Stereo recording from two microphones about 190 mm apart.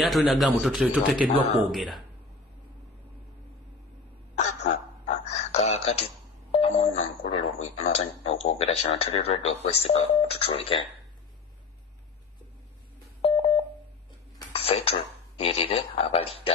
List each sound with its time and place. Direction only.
0.0 s speech: centre (ahead or behind)
4.4 s a sound: 35° left (ahead or behind)
7.6 s speech: 35° left (ahead or behind)
13.2 s telephone dialing: 30° left (ahead or behind)
14.5 s speech: 30° left (ahead or behind)